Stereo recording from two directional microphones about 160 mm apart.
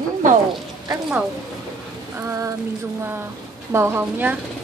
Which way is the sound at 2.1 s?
20° right (ahead or behind).